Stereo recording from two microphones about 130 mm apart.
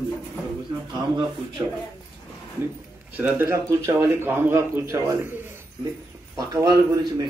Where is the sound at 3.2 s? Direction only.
15° right (ahead or behind).